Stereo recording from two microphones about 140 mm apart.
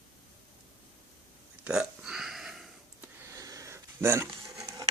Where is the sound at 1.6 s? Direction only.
5° right (ahead or behind).